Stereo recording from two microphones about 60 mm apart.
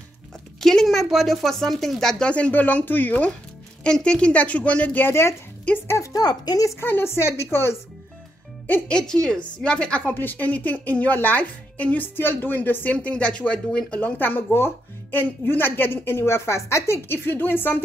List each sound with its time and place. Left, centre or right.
0.6 s a sound: centre
0.8 s speech: centre
2.2 s a woman's voice: left
3.8 s a woman's voice: centre
6.1 s speech: left
6.8 s a woman's voice: left
8.8 s a woman's voice: centre
10.0 s a woman's voice: left
12.9 s speech: centre; by 17.2 s left
17.3 s speech: left